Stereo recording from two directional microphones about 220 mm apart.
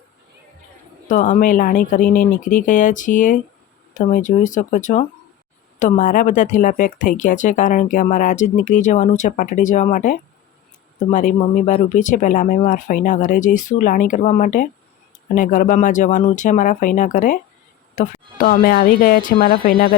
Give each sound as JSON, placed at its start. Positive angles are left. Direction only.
{"t": 1.0, "sound": "speech", "side_deg": 35}